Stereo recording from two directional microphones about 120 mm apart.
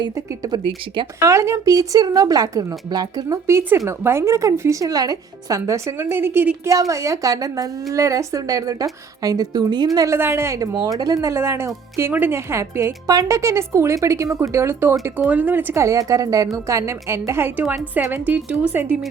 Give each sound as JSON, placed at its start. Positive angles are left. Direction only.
{"t": 0.0, "sound": "speech", "side_deg": -35}
{"t": 1.2, "sound": "a woman's voice", "side_deg": -25}
{"t": 6.7, "sound": "a woman's voice", "side_deg": -25}